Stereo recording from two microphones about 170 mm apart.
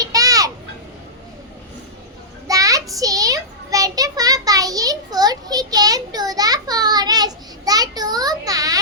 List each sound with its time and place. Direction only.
0.0 s children playing: 20° right (ahead or behind)
2.5 s child singing: 20° right (ahead or behind)